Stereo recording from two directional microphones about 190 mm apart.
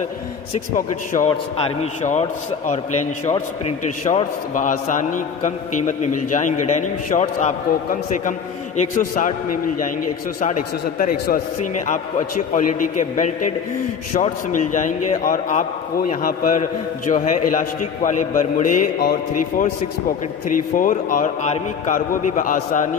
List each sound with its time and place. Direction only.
0.7 s a man's voice: 45° left (ahead or behind)
10.4 s a man's voice: 45° left (ahead or behind)
20.4 s a man's voice: 45° left (ahead or behind)